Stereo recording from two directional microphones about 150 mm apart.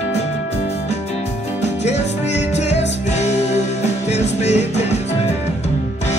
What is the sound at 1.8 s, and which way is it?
Music, 50° left (ahead or behind).